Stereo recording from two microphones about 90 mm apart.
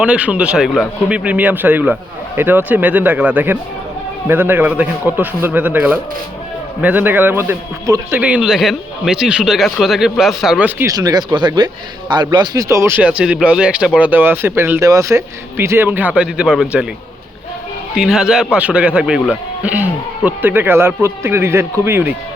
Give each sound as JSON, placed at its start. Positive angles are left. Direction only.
{"t": 0.0, "sound": "speech", "side_deg": -10}
{"t": 0.7, "sound": "speech", "side_deg": 0}
{"t": 1.1, "sound": "a man's voice", "side_deg": -15}
{"t": 8.2, "sound": "speech", "side_deg": -10}
{"t": 10.8, "sound": "speech", "side_deg": -45}
{"t": 12.5, "sound": "speech", "side_deg": -35}
{"t": 13.0, "sound": "a man's voice", "side_deg": -15}
{"t": 17.9, "sound": "speech", "side_deg": -10}